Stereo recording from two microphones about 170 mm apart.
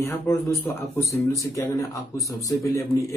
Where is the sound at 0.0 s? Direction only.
15° left (ahead or behind).